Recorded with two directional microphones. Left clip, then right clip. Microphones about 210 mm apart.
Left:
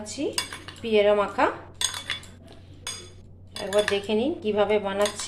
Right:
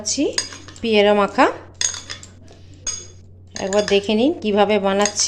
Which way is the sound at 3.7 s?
50° right (ahead or behind).